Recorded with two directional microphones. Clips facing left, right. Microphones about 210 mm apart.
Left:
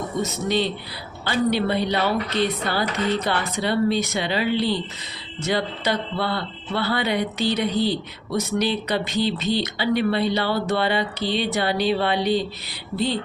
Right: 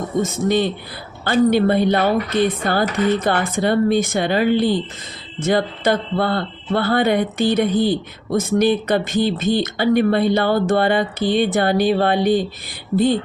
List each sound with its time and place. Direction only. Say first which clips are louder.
0.2 s speech: right 5 dB; 50° right (ahead or behind)